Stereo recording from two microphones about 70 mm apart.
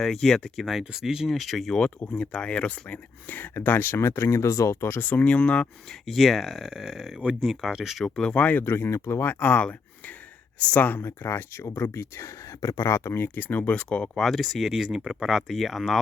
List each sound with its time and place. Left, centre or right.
0.0 s speech: centre; by 5.2 s left
5.2 s speech: centre
5.9 s speech: centre
8.0 s speech: centre
8.7 s speech: left
13.7 s speech: centre
14.2 s speech: centre